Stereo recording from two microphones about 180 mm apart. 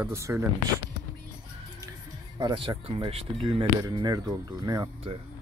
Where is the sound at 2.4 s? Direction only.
25° right (ahead or behind).